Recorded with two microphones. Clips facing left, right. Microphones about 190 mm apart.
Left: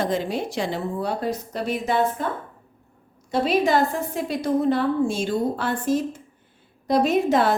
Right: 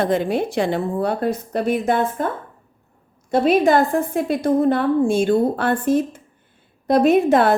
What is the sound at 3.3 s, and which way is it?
A woman's voice, 50° right (ahead or behind).